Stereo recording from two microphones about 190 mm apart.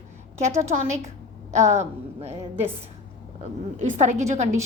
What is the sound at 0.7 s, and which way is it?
A woman's voice, 35° right (ahead or behind).